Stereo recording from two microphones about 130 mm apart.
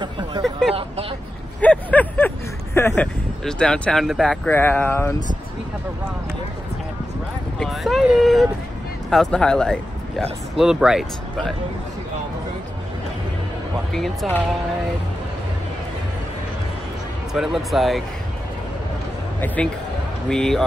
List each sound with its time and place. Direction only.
0.0 s hubbub: 35° right (ahead or behind)
0.4 s a sound: centre (ahead or behind)
3.0 s speech: 5° left (ahead or behind)
4.5 s speech: 15° left (ahead or behind)
7.5 s speech: centre (ahead or behind)
13.9 s speech: centre (ahead or behind)
17.3 s speech: centre (ahead or behind)
19.4 s speech: 10° left (ahead or behind)